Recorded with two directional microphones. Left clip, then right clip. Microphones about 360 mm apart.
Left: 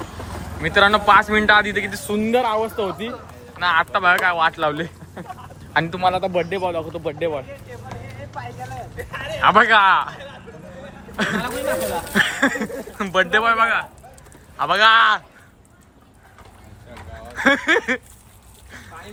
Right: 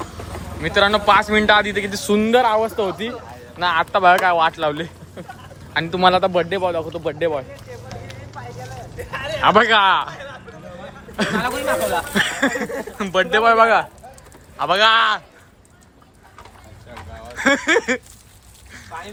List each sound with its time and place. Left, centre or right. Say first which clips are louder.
0.6 s a man's voice: left 1 dB; centre
8.4 s vehicle: left 3 dB; left
9.1 s a sound: right 3 dB; right
9.4 s speech: even; centre
11.2 s speech: right 2 dB; centre
16.9 s a sound: right 1 dB; centre